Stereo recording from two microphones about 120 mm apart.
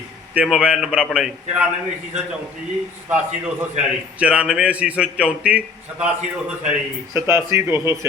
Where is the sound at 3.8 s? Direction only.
10° right (ahead or behind).